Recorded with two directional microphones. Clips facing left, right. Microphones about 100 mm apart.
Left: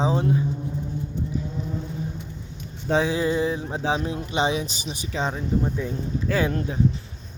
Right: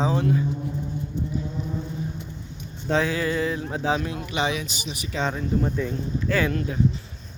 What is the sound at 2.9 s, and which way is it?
Speech, 15° left (ahead or behind).